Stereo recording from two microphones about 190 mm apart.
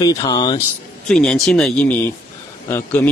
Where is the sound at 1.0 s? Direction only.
5° left (ahead or behind).